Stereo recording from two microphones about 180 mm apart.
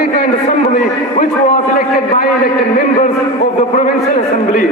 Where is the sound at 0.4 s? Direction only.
40° left (ahead or behind).